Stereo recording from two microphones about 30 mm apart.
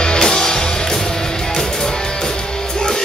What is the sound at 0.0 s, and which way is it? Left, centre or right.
Music, left.